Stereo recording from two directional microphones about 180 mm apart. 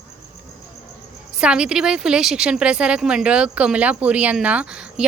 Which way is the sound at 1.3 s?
5° right (ahead or behind).